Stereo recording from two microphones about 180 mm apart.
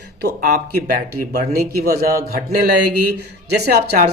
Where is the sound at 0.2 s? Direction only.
65° right (ahead or behind).